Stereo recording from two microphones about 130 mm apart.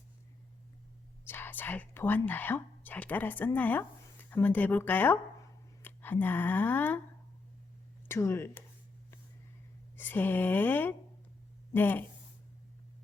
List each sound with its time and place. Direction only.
1.2 s speech: 15° left (ahead or behind)
8.0 s speech: 20° left (ahead or behind)
10.0 s speech: 15° left (ahead or behind)